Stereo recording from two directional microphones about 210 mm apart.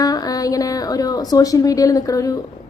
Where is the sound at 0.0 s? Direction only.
15° left (ahead or behind).